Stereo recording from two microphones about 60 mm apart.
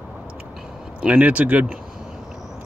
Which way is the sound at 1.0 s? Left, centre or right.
Right.